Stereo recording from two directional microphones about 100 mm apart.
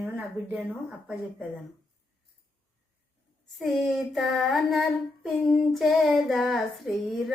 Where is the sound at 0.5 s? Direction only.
10° right (ahead or behind).